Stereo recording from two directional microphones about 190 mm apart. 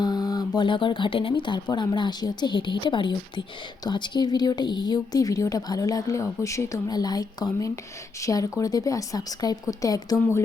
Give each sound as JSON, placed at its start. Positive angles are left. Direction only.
{"t": 0.0, "sound": "speech", "side_deg": 20}